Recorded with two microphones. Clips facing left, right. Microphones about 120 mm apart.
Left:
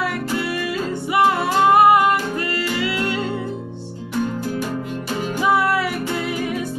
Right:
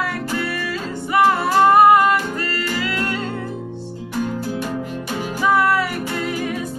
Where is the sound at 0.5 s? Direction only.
15° left (ahead or behind).